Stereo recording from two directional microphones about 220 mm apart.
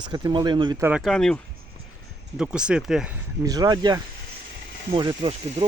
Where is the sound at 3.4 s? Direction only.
15° right (ahead or behind).